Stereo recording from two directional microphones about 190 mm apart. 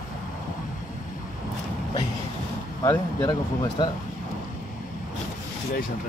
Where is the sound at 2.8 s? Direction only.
25° left (ahead or behind).